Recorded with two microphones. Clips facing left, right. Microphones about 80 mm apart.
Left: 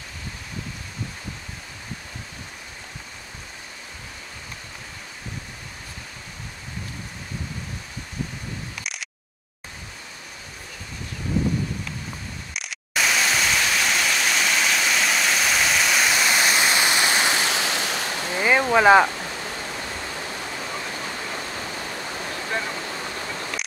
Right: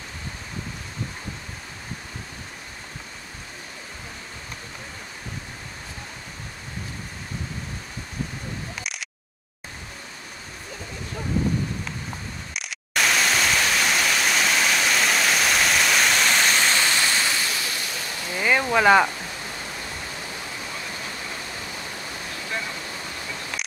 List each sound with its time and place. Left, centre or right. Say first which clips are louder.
12.5 s pink noise: right 1 dB; centre
17.5 s waves: left 5 dB; left
18.2 s a sound: left 2 dB; centre
22.3 s waterfall: left 3 dB; left